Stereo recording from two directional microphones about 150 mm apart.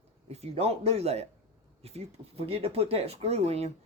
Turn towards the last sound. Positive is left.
turn(degrees=-45)  # may be behind; listen again after turning